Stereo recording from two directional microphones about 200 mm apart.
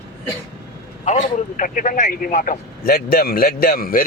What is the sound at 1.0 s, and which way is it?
Speech, 40° left (ahead or behind).